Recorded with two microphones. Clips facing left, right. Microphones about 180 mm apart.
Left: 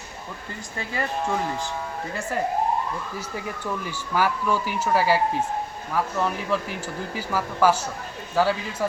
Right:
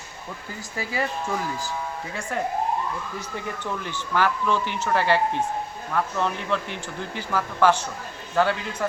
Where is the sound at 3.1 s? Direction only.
10° left (ahead or behind).